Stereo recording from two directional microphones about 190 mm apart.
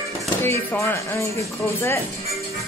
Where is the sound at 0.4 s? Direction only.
10° left (ahead or behind).